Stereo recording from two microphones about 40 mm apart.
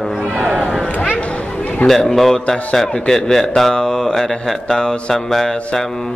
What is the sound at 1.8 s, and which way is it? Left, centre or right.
Speech, centre.